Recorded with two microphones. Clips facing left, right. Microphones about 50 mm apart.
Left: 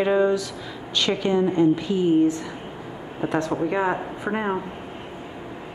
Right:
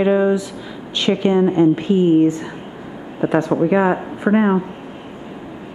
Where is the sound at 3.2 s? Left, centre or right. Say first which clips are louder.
Right 7 dB; right.